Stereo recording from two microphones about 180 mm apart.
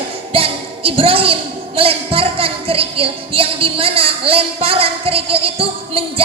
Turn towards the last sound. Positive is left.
turn(degrees=-30)  # may be behind; listen again after turning